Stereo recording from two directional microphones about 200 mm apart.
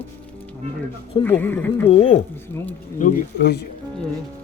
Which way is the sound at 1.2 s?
10° left (ahead or behind).